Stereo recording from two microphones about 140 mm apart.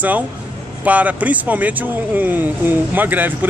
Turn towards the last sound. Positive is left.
turn(degrees=-15)  # may be behind; listen again after turning